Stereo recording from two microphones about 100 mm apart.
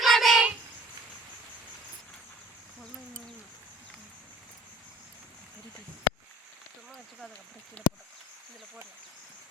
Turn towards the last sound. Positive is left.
turn(degrees=10)  # may be behind; listen again after turning